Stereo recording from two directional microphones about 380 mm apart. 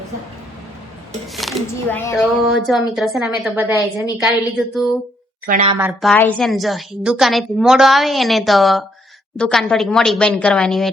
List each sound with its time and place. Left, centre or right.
1.4 s a woman's voice: centre
5.5 s speech: right
5.8 s a woman's voice: centre